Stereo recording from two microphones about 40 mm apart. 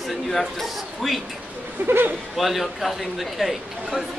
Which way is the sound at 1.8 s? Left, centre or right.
Right.